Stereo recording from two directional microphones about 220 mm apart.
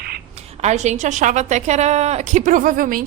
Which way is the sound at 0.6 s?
30° right (ahead or behind).